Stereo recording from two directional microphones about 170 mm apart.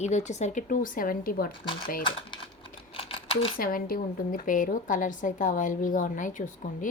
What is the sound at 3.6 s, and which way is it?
A woman's voice, 55° left (ahead or behind).